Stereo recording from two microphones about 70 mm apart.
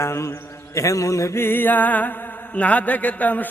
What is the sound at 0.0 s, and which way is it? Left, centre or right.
Mantra, left.